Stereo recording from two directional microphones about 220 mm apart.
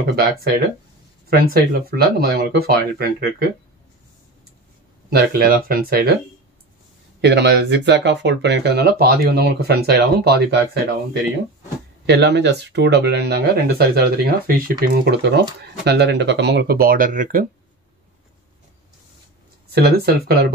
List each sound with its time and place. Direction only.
0.0 s speech: 45° right (ahead or behind)
5.1 s speech: 45° right (ahead or behind)
7.2 s speech: 50° right (ahead or behind)
12.1 s speech: 50° right (ahead or behind)
19.7 s speech: 45° right (ahead or behind)